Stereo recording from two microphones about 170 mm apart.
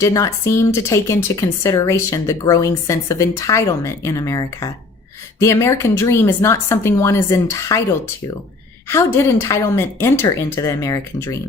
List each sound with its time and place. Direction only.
0.0 s speech: 15° left (ahead or behind)
8.9 s speech: 15° left (ahead or behind)